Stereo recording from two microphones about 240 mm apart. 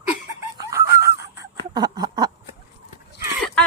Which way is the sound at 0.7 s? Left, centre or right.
Centre.